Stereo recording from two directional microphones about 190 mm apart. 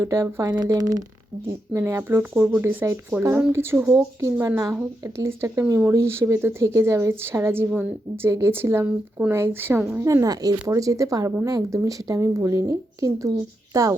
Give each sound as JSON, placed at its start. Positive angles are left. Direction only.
{"t": 0.0, "sound": "speech", "side_deg": -15}